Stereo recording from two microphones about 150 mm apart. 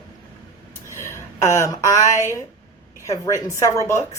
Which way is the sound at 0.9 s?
15° left (ahead or behind).